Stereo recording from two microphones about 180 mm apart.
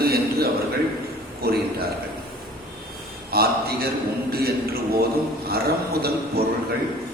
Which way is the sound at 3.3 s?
60° right (ahead or behind).